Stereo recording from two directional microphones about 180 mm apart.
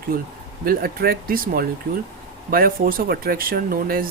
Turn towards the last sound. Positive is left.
turn(degrees=-55)  # may be behind; listen again after turning